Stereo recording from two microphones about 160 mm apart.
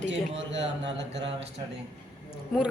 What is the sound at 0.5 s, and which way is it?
Speech, 90° right.